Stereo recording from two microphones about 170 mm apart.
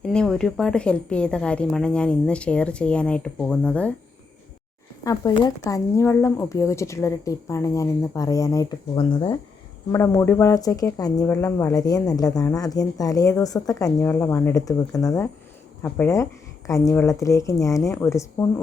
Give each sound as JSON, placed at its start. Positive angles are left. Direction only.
{"t": 0.0, "sound": "a woman's voice", "side_deg": 5}
{"t": 5.0, "sound": "a woman's voice", "side_deg": 25}